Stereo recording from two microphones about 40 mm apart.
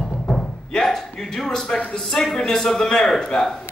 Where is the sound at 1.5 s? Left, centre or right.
Centre.